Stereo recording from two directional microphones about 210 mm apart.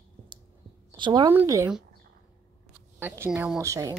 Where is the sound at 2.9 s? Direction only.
10° right (ahead or behind).